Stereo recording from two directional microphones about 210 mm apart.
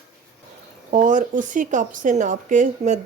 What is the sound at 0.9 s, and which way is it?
Speech, 40° right (ahead or behind).